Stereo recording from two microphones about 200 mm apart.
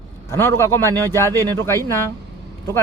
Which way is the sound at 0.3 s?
10° left (ahead or behind).